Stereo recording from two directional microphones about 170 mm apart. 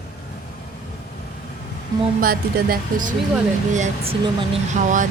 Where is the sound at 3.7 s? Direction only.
40° right (ahead or behind).